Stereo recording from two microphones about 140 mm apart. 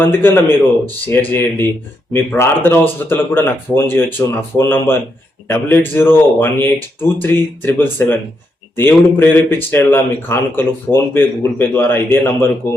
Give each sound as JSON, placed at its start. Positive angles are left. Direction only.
{"t": 0.0, "sound": "speech", "side_deg": 15}